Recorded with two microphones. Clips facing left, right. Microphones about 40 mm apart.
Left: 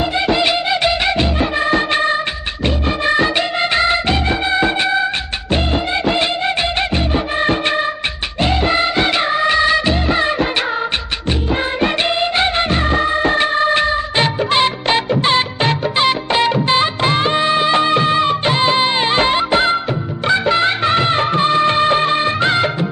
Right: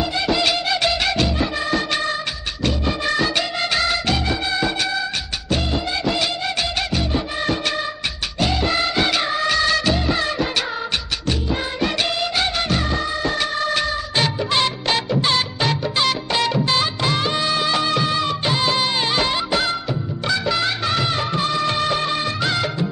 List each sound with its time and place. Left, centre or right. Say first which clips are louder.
0.0 s music: left 4 dB; left
8.4 s music of bollywood: left 5 dB; left
11.8 s music of bollywood: left 4 dB; left